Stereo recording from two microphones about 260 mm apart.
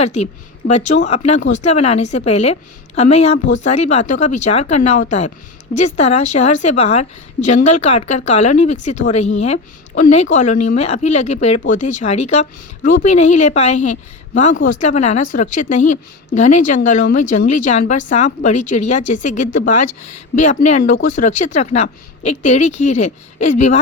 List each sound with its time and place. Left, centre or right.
0.0 s speech: left
3.3 s speech: left
3.6 s speech: left